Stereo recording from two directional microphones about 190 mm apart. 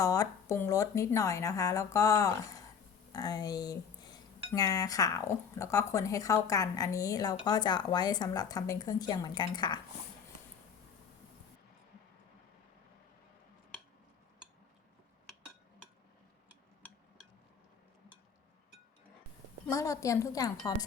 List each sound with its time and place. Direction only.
0.0 s speech: 20° left (ahead or behind)
16.8 s a sound: 10° left (ahead or behind)
19.7 s speech: 15° left (ahead or behind)